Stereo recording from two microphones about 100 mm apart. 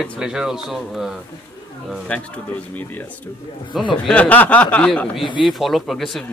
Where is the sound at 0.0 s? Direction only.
5° right (ahead or behind).